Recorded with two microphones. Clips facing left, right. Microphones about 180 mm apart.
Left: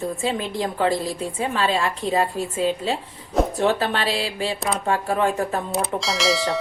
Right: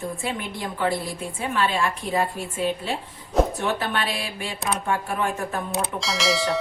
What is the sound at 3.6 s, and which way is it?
A woman's voice, 30° left (ahead or behind).